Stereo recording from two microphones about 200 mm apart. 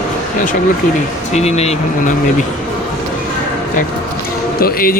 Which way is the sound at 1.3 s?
30° left (ahead or behind).